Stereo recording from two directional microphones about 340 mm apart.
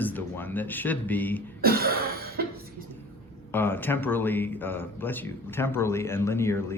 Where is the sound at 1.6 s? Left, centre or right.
Right.